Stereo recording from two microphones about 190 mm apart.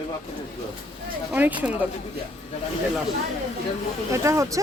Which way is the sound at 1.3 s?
10° right (ahead or behind).